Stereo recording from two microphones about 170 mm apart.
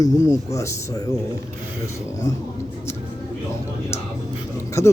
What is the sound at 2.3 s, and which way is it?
Speech, 20° left (ahead or behind).